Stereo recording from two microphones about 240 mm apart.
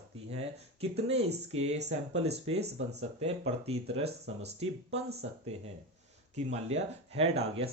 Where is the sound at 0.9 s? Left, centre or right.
Right.